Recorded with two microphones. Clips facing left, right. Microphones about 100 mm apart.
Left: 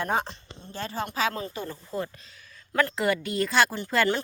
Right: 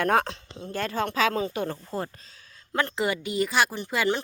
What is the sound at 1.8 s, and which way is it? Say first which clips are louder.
A woman's voice: even; 35° right (ahead or behind).